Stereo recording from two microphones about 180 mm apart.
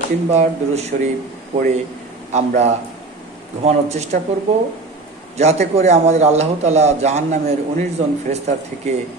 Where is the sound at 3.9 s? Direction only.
40° right (ahead or behind).